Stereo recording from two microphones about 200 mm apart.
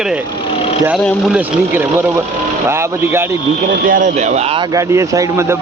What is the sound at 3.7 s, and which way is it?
Speech, 40° right (ahead or behind).